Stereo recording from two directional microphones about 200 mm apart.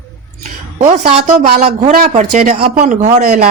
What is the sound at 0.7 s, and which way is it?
Speech, 35° right (ahead or behind).